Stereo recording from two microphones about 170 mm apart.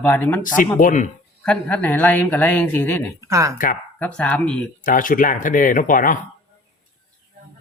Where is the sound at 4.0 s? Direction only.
5° left (ahead or behind).